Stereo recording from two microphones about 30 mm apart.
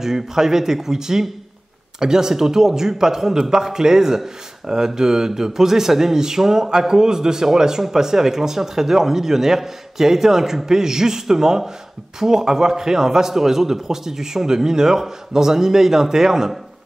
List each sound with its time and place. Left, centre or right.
0.0 s a man's voice: centre